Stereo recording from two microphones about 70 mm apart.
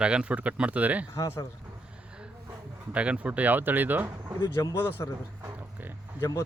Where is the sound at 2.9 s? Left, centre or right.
Centre.